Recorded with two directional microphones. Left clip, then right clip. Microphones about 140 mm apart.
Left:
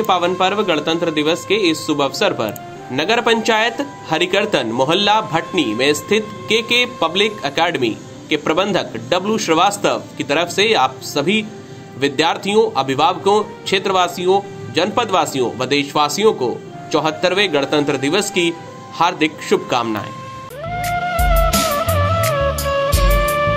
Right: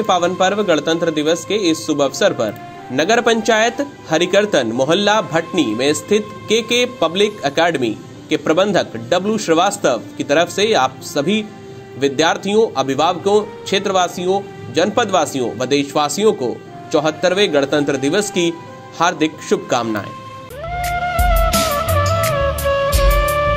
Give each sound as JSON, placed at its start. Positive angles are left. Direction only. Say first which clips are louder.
{"t": 0.0, "sound": "speech", "louder": "right 1 dB", "side_deg": -45}
{"t": 20.6, "sound": "music", "louder": "even", "side_deg": 0}